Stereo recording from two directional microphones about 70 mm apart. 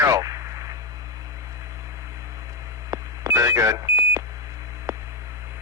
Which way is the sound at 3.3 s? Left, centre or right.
Right.